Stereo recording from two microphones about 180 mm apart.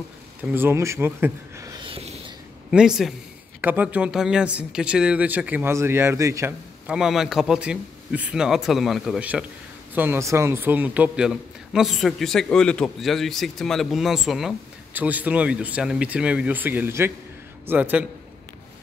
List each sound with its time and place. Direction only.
0.4 s a man's voice: 10° right (ahead or behind)
1.9 s a sound: 35° right (ahead or behind)
2.7 s a man's voice: 5° right (ahead or behind)
6.9 s a man's voice: centre (ahead or behind)